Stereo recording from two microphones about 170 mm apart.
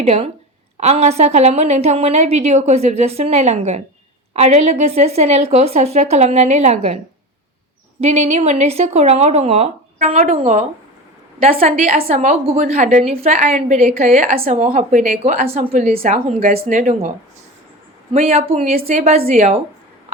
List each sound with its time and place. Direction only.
0.0 s a woman's voice: 35° right (ahead or behind)
8.0 s a woman's voice: 40° right (ahead or behind)
14.7 s a woman's voice: 50° right (ahead or behind)
16.6 s a woman's voice: 50° right (ahead or behind)
18.3 s a woman's voice: 35° right (ahead or behind)